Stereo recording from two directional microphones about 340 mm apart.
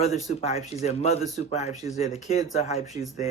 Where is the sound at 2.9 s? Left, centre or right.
Centre.